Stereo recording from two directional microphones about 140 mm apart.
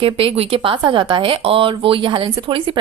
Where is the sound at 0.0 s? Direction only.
40° right (ahead or behind).